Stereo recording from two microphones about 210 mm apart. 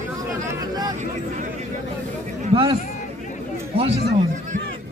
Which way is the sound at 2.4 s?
25° right (ahead or behind).